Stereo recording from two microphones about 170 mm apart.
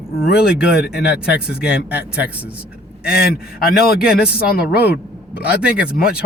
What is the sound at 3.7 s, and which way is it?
Speech, 60° left (ahead or behind).